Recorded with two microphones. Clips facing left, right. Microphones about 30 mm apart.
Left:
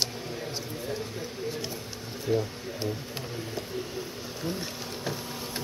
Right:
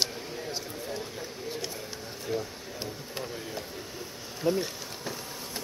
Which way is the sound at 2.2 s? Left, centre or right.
Centre.